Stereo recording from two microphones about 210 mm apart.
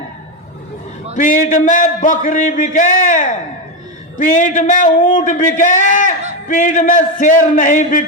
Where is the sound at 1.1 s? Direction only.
40° left (ahead or behind).